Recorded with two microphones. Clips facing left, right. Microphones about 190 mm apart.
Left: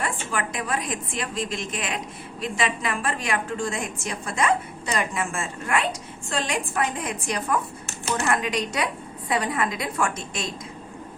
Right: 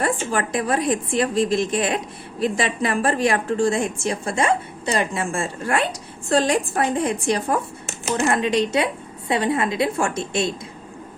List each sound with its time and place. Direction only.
0.0 s a woman's voice: 35° right (ahead or behind)